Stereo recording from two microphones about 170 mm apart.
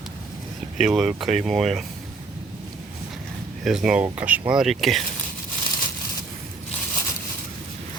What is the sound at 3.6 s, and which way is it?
Speech, centre (ahead or behind).